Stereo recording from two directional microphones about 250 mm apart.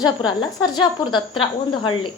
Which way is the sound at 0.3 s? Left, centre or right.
Centre.